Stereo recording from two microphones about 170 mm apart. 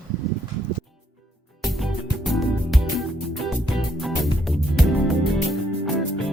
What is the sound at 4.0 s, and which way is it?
Music, centre (ahead or behind).